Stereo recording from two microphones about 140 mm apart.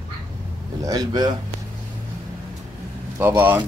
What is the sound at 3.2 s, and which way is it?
Speech, 15° right (ahead or behind).